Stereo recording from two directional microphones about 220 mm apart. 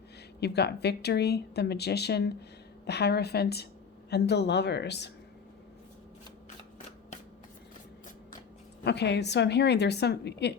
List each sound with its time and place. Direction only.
0.3 s speech: 50° left (ahead or behind)
8.8 s speech: 50° left (ahead or behind)